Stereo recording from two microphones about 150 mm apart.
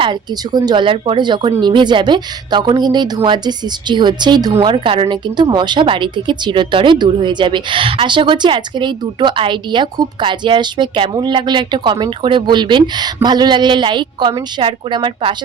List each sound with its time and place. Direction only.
0.0 s speech: 30° right (ahead or behind)